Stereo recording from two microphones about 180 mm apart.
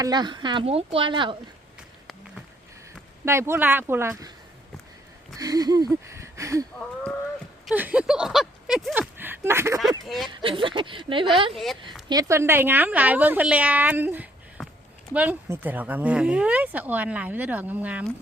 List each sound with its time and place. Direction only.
0.0 s speech: 25° right (ahead or behind)
3.2 s speech: 15° right (ahead or behind)
5.4 s speech: 20° right (ahead or behind)
7.7 s speech: 5° right (ahead or behind); by 11.5 s 30° right (ahead or behind)
11.5 s speech: centre (ahead or behind)
12.0 s speech: 20° right (ahead or behind)